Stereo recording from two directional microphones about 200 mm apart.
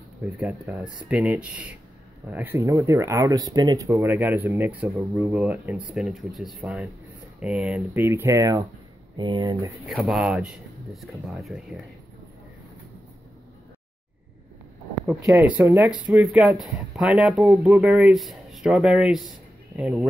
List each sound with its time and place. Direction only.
0.4 s speech: 5° right (ahead or behind)
9.8 s speech: centre (ahead or behind)
15.2 s speech: 10° right (ahead or behind)